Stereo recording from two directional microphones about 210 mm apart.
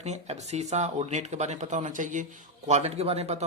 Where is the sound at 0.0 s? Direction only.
30° right (ahead or behind).